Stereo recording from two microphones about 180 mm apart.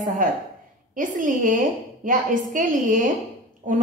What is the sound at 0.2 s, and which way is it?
A woman's voice, 50° right (ahead or behind).